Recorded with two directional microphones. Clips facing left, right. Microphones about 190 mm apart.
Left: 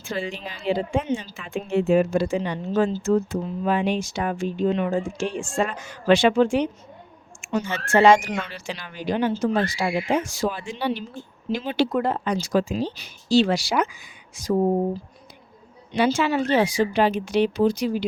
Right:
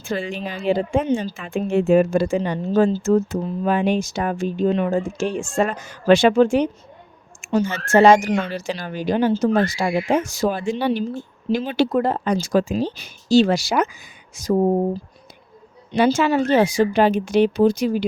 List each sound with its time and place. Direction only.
0.0 s a woman's voice: 50° right (ahead or behind)
15.9 s a woman's voice: 40° right (ahead or behind)